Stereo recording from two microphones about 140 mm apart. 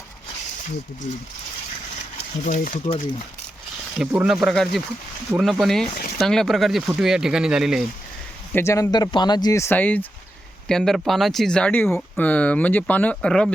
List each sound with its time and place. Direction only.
1.1 s speech: 60° left (ahead or behind)
2.4 s speech: 65° left (ahead or behind)
3.9 s speech: 5° right (ahead or behind)
8.5 s speech: 20° left (ahead or behind)